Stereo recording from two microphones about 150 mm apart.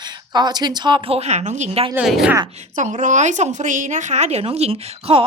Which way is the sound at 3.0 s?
55° right (ahead or behind).